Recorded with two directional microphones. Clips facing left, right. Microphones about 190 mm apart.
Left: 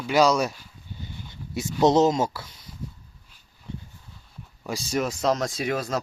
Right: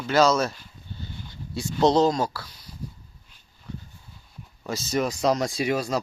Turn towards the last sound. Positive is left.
turn(degrees=0)  # may be behind; listen again after turning